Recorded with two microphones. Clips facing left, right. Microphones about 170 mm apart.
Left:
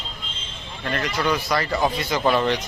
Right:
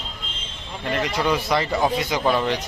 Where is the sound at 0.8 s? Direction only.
10° right (ahead or behind).